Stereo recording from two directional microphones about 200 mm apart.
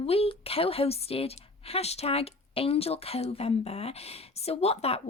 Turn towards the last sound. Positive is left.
turn(degrees=30)  # may be behind; listen again after turning